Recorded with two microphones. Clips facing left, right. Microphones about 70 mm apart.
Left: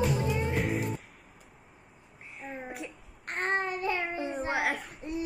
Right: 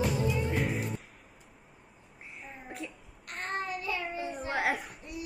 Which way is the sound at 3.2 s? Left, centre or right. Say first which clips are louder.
Left 5 dB; left.